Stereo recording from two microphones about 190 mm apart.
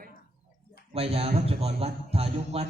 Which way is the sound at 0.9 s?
30° right (ahead or behind).